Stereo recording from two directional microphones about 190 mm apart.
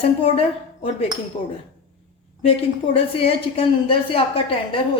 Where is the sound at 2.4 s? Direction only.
30° left (ahead or behind).